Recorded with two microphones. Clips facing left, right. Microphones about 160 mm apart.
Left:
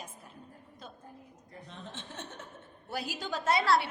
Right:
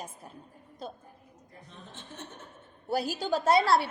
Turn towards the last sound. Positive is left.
turn(degrees=-35)  # may be behind; listen again after turning